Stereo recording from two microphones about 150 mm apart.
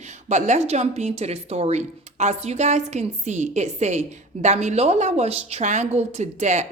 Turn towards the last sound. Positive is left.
turn(degrees=-50)  # may be behind; listen again after turning